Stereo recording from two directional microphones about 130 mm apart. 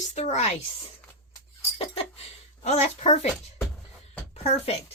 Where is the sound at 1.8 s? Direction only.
50° left (ahead or behind).